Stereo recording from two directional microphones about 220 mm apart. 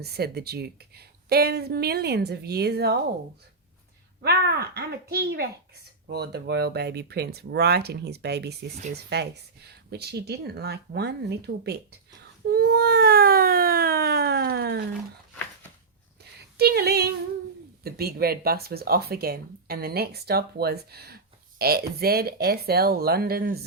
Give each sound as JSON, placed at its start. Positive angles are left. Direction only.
{"t": 0.0, "sound": "speech", "side_deg": -45}
{"t": 4.2, "sound": "speech", "side_deg": -45}
{"t": 16.6, "sound": "speech", "side_deg": -45}